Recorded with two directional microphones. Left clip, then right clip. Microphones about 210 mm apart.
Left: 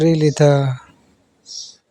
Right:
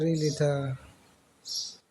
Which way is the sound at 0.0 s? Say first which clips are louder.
Left 13 dB; 40° left (ahead or behind).